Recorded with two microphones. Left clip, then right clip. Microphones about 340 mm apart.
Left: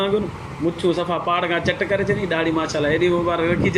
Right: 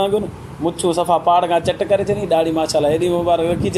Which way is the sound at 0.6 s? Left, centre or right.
Right.